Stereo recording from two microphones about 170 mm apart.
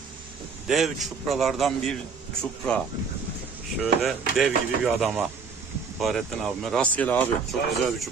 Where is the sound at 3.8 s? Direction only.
Centre (ahead or behind).